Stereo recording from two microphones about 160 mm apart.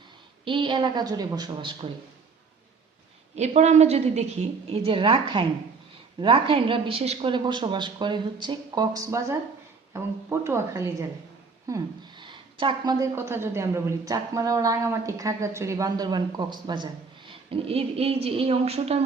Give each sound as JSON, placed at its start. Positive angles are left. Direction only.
{"t": 0.4, "sound": "speech", "side_deg": -30}
{"t": 3.3, "sound": "a woman's voice", "side_deg": -45}
{"t": 11.7, "sound": "speech", "side_deg": -30}